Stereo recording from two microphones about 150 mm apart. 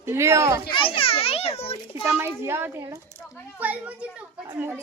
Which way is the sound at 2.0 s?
15° right (ahead or behind).